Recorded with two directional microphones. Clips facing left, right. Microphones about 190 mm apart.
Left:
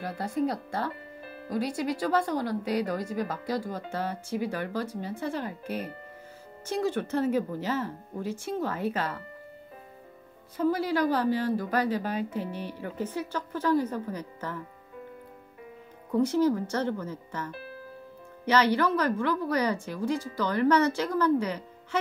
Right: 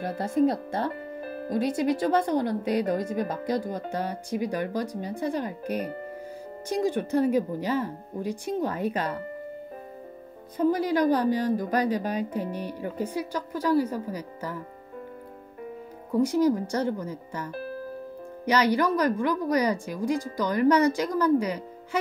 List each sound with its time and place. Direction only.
0.5 s a woman's voice: 20° right (ahead or behind)
1.2 s music: 45° right (ahead or behind)
1.5 s a woman's voice: 20° right (ahead or behind)
10.6 s speech: 20° right (ahead or behind)
16.1 s speech: 10° right (ahead or behind)
17.5 s speech: 45° right (ahead or behind)
18.4 s speech: 15° right (ahead or behind)